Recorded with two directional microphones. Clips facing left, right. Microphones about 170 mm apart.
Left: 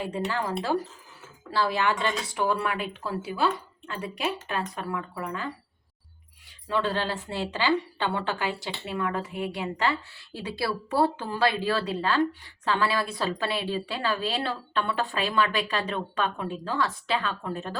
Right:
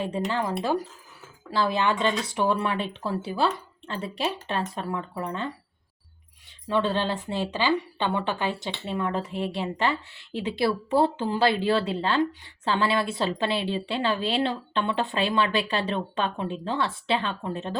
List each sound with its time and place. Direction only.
0.0 s a woman's voice: 20° right (ahead or behind)
6.7 s a woman's voice: 20° right (ahead or behind)